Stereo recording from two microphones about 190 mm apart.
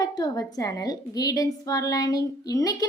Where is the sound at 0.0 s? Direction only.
20° left (ahead or behind).